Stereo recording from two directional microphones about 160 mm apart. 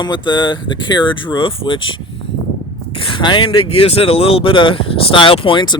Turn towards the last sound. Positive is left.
turn(degrees=30)  # may be behind; listen again after turning